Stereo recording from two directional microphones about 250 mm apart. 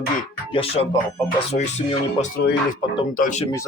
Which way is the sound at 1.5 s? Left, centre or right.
Left.